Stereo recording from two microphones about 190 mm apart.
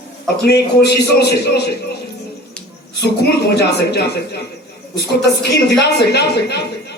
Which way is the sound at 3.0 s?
60° left (ahead or behind).